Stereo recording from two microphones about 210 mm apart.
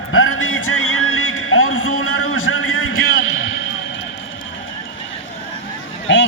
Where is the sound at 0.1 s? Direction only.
75° left (ahead or behind).